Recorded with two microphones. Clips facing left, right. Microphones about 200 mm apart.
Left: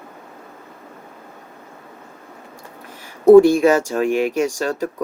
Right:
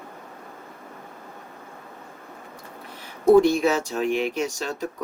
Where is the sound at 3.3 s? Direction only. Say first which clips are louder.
Left 8 dB; 50° left (ahead or behind).